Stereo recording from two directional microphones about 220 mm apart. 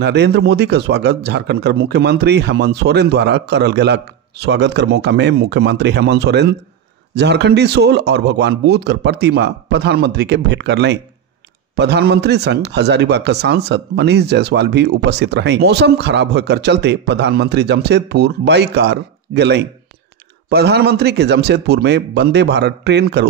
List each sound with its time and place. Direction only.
0.0 s a man's voice: 50° right (ahead or behind)